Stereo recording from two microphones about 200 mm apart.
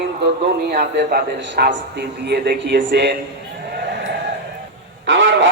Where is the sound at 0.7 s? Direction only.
55° right (ahead or behind).